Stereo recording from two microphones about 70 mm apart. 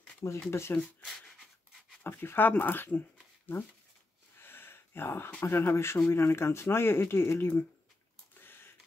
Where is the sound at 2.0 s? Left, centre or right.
Left.